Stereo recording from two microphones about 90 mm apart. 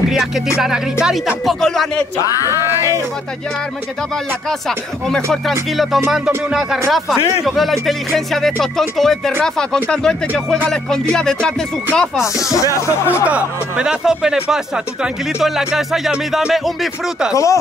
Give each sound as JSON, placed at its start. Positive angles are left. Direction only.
{"t": 0.1, "sound": "speech", "side_deg": -5}
{"t": 4.5, "sound": "speech", "side_deg": 5}
{"t": 12.4, "sound": "speech", "side_deg": 40}
{"t": 13.2, "sound": "speech", "side_deg": -10}
{"t": 17.3, "sound": "speech", "side_deg": 35}